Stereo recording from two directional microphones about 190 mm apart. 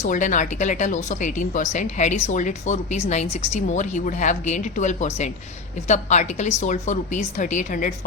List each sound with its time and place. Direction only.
0.0 s a woman's voice: 40° left (ahead or behind)